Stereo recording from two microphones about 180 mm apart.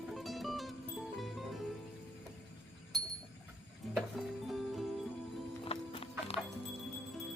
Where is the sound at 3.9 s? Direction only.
Centre (ahead or behind).